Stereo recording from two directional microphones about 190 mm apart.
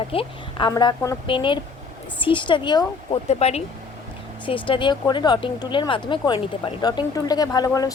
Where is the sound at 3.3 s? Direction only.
35° left (ahead or behind).